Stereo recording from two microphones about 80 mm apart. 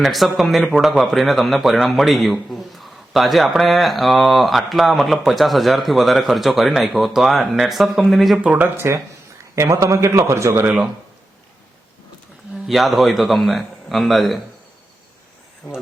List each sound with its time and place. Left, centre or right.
0.0 s a man's voice: centre
8.4 s speech: centre
8.6 s speech: right
9.6 s a man's voice: right
12.6 s a man's voice: centre